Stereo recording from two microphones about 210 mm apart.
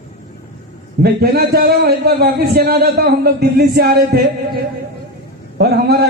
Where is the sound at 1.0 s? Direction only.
45° right (ahead or behind).